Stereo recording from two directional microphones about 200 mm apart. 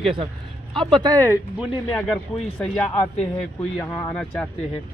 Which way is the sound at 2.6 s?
5° left (ahead or behind).